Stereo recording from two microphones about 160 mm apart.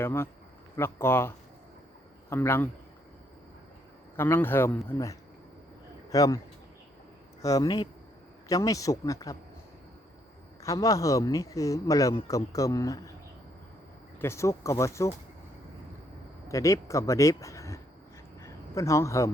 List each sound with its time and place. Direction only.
0.0 s speech: 15° left (ahead or behind)
2.3 s speech: 15° left (ahead or behind)
4.2 s speech: 15° left (ahead or behind)
7.4 s speech: 20° left (ahead or behind)
10.6 s speech: 20° left (ahead or behind)
14.2 s speech: 15° left (ahead or behind)
16.5 s speech: 20° left (ahead or behind)
18.3 s a sound: 20° left (ahead or behind)